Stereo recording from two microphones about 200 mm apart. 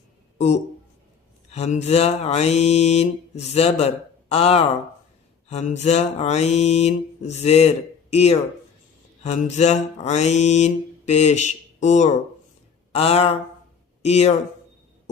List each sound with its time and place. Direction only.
0.3 s speech: 35° left (ahead or behind)
1.5 s mantra: 30° left (ahead or behind)